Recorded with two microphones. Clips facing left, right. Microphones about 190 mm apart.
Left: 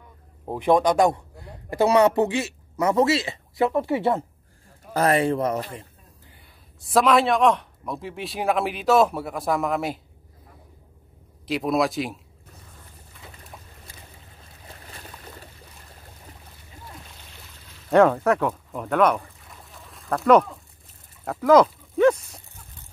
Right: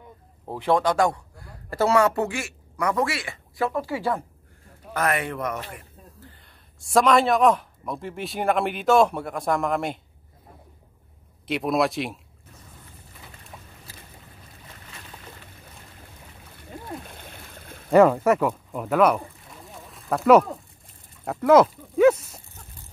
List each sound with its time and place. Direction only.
0.5 s speech: 20° left (ahead or behind)
6.8 s a man's voice: centre (ahead or behind)
11.4 s a man's voice: centre (ahead or behind)
16.5 s a sound: 55° right (ahead or behind)
17.8 s a man's voice: 5° right (ahead or behind)